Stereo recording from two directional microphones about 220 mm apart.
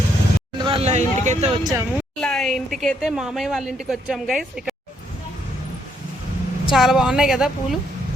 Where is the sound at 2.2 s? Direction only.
5° left (ahead or behind).